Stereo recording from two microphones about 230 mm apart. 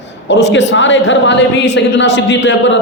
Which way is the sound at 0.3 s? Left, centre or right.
Left.